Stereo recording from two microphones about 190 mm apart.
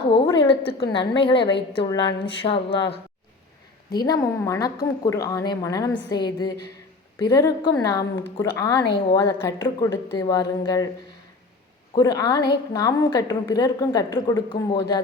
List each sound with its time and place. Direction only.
0.3 s a woman's voice: 20° left (ahead or behind)
4.0 s a woman's voice: 20° left (ahead or behind)
11.9 s a woman's voice: 20° left (ahead or behind)